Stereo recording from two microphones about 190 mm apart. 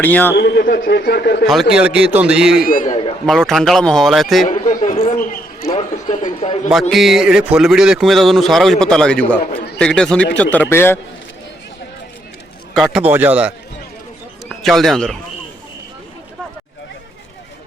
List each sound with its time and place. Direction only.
0.0 s a man's voice: 10° left (ahead or behind)
0.3 s a man's voice: 60° left (ahead or behind)
1.7 s speech: 5° right (ahead or behind)
2.6 s a man's voice: 45° left (ahead or behind)
3.2 s speech: centre (ahead or behind)
4.4 s a man's voice: 40° left (ahead or behind)
6.9 s a man's voice: centre (ahead or behind)
12.7 s a man's voice: centre (ahead or behind)
14.6 s speech: centre (ahead or behind)